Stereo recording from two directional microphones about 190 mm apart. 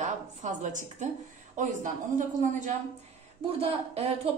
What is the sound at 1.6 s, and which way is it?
A woman's voice, 40° right (ahead or behind).